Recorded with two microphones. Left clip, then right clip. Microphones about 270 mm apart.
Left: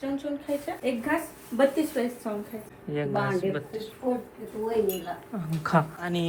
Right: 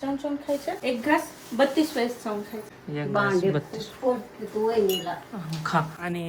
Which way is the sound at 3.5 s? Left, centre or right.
Right.